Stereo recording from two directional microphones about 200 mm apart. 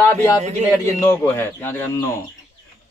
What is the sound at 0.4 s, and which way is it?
Speech, 35° right (ahead or behind).